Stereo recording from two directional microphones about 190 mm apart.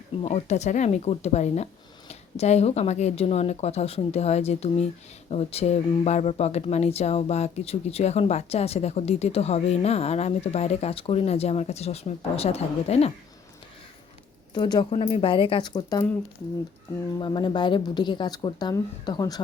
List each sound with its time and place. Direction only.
0.2 s speech: 35° left (ahead or behind)
14.5 s speech: 20° left (ahead or behind)
17.2 s speech: 25° left (ahead or behind)